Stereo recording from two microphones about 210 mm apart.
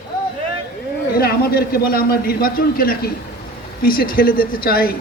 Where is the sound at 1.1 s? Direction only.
45° left (ahead or behind).